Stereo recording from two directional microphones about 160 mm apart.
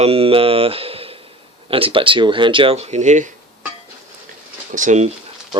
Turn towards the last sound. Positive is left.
turn(degrees=-50)  # may be behind; listen again after turning